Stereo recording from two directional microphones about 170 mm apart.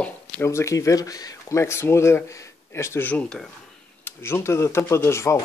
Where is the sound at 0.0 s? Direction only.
15° left (ahead or behind).